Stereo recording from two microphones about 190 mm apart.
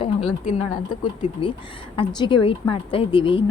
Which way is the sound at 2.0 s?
25° left (ahead or behind).